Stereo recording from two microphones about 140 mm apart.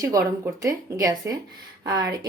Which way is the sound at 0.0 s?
25° right (ahead or behind).